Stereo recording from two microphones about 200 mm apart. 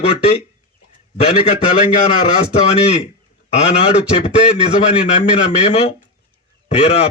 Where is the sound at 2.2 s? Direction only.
30° left (ahead or behind).